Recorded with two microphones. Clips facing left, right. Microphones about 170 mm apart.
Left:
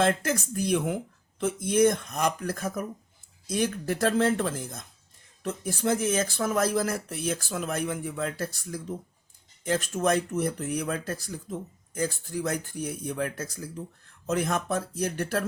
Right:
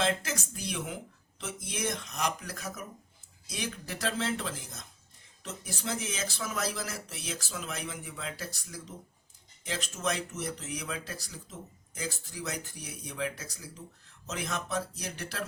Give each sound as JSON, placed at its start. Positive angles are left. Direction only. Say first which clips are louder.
{"t": 0.0, "sound": "speech", "louder": "left 6 dB", "side_deg": 50}